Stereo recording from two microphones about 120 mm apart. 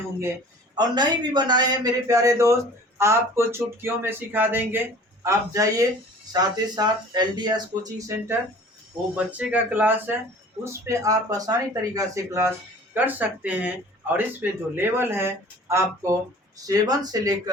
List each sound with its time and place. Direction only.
0.8 s speech: 40° right (ahead or behind); by 4.8 s 15° right (ahead or behind)
5.2 s speech: 25° right (ahead or behind)
9.1 s speech: 10° right (ahead or behind); by 17.5 s 30° right (ahead or behind)